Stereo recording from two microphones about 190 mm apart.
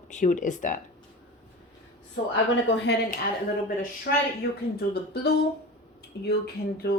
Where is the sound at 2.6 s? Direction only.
70° left (ahead or behind).